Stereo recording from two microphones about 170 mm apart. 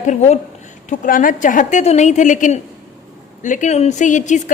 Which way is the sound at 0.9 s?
55° left (ahead or behind).